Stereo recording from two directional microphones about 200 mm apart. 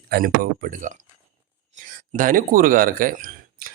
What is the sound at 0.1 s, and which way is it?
Speech, 45° right (ahead or behind).